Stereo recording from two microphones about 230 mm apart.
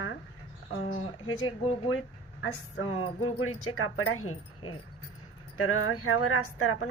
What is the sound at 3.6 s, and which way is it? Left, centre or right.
A woman's voice, left.